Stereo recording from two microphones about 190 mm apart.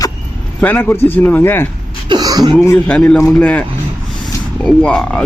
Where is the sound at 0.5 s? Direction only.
10° left (ahead or behind).